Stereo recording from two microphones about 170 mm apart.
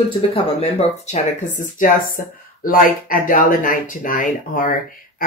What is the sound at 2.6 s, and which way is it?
Speech, 55° left (ahead or behind).